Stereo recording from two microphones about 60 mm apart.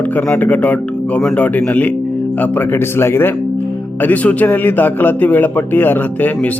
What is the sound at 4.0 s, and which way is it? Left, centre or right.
A man's voice, left.